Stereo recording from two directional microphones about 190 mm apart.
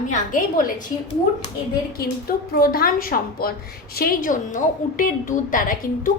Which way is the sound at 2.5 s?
50° left (ahead or behind).